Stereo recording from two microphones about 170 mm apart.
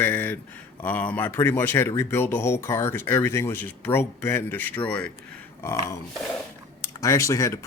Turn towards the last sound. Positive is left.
turn(degrees=15)  # may be behind; listen again after turning